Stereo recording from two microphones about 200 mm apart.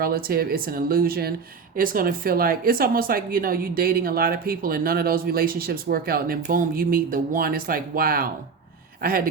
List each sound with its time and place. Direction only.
0.0 s a woman's voice: 45° right (ahead or behind)